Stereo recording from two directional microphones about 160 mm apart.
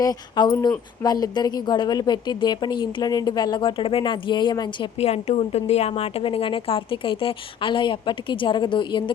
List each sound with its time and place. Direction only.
0.0 s a woman's voice: 25° left (ahead or behind)
4.9 s a woman's voice: 40° left (ahead or behind)